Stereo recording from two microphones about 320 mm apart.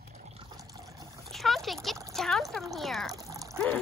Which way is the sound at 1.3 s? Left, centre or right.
Centre.